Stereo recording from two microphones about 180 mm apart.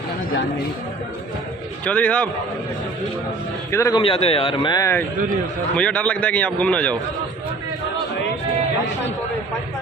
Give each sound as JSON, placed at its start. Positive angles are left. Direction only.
{"t": 1.9, "sound": "a man's voice", "side_deg": 5}
{"t": 3.7, "sound": "a man's voice", "side_deg": 15}
{"t": 4.0, "sound": "a man's voice", "side_deg": 30}
{"t": 5.8, "sound": "a man's voice", "side_deg": 5}